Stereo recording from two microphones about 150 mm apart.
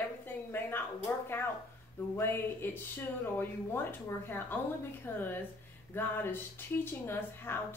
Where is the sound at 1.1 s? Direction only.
15° left (ahead or behind).